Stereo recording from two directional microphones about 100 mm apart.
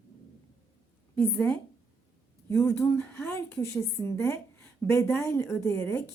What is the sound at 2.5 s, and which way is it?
Speech, 25° left (ahead or behind).